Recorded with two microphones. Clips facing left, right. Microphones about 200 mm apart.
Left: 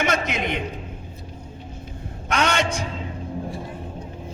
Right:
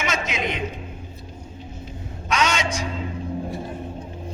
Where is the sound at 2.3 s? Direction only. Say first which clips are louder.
Left 1 dB; 60° left (ahead or behind).